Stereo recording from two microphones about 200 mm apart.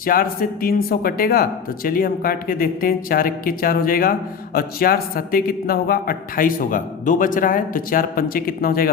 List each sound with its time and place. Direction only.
0.0 s a man's voice: 45° left (ahead or behind)